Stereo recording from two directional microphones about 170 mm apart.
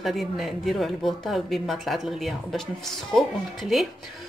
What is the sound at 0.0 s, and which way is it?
Speech, centre (ahead or behind).